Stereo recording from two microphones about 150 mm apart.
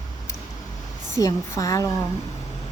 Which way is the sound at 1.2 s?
20° left (ahead or behind).